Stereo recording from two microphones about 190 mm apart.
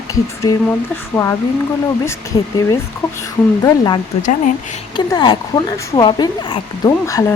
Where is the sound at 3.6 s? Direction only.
20° left (ahead or behind).